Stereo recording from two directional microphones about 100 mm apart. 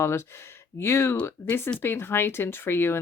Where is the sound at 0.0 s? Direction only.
25° left (ahead or behind).